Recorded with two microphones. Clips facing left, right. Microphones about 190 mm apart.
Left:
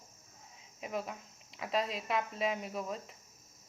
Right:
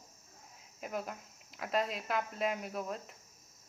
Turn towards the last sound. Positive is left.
turn(degrees=0)  # may be behind; listen again after turning